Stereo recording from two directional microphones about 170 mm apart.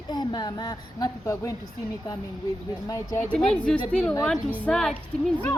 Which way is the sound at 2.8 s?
15° left (ahead or behind).